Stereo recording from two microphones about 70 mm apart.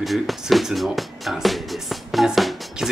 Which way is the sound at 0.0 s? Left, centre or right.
Centre.